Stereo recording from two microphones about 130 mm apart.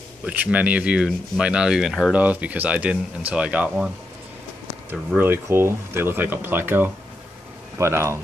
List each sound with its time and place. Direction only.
0.2 s speech: 10° right (ahead or behind)
5.1 s speech: 15° right (ahead or behind)